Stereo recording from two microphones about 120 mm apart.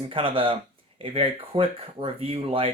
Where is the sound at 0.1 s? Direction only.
45° right (ahead or behind).